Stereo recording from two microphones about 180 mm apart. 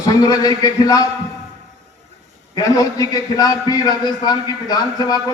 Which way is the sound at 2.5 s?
20° left (ahead or behind).